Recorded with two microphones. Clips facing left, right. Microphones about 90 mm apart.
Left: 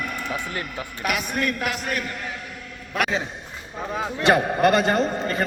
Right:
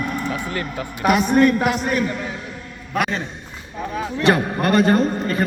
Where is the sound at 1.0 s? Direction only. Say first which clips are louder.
Right 10 dB; 40° right (ahead or behind).